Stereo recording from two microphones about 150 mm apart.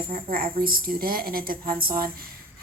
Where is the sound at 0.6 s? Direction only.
80° right.